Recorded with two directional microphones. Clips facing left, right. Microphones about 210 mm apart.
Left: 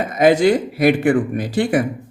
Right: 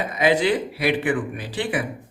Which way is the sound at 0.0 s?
45° left (ahead or behind).